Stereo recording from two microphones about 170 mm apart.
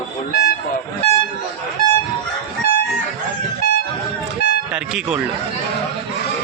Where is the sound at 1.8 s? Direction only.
60° left (ahead or behind).